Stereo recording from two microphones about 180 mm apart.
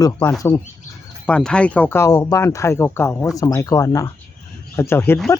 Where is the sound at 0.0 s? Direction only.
15° left (ahead or behind).